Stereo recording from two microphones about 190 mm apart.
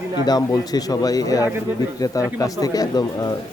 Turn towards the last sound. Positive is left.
turn(degrees=20)  # may be behind; listen again after turning